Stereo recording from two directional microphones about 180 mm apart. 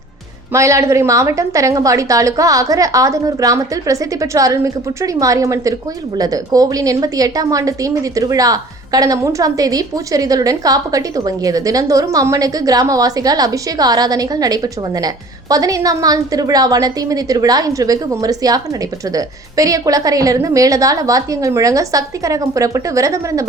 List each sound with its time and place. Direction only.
0.5 s a woman's voice: 15° right (ahead or behind)